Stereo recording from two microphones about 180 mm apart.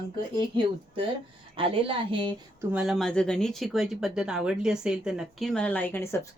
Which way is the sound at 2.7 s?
Centre (ahead or behind).